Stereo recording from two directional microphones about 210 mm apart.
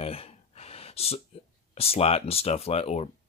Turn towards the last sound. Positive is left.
turn(degrees=30)  # may be behind; listen again after turning